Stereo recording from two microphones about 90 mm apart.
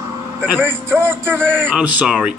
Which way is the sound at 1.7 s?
10° right (ahead or behind).